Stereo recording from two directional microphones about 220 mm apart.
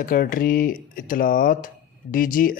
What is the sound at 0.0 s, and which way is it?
Speech, 40° left (ahead or behind).